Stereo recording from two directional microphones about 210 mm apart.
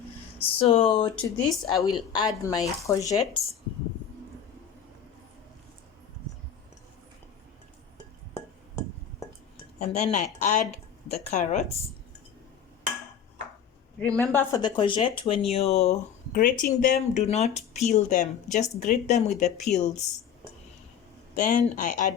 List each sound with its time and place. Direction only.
0.3 s speech: 25° left (ahead or behind)
9.7 s speech: 35° left (ahead or behind)
14.0 s speech: 10° left (ahead or behind)
14.6 s speech: 25° left (ahead or behind); by 17.0 s 40° left (ahead or behind)
17.2 s speech: 30° left (ahead or behind)
21.3 s speech: 35° left (ahead or behind)